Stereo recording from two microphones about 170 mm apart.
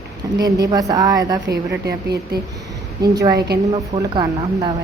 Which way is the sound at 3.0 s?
20° right (ahead or behind).